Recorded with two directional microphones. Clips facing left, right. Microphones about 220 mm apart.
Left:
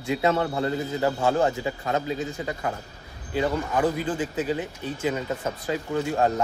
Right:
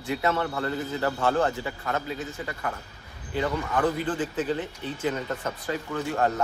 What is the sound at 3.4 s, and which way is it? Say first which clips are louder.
Speech: left 2 dB; 10° left (ahead or behind).